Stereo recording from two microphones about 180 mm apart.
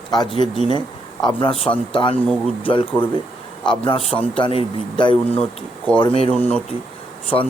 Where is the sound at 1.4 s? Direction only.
30° left (ahead or behind).